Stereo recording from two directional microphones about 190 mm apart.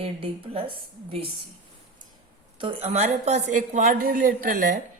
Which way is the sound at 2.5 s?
30° right (ahead or behind).